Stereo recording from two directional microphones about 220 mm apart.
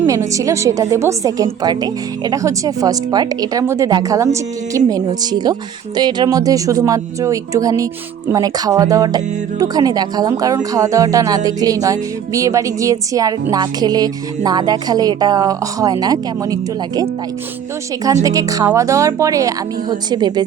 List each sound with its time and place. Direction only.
0.0 s speech: 15° right (ahead or behind)